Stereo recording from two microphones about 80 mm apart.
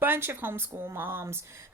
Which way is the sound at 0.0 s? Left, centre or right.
Right.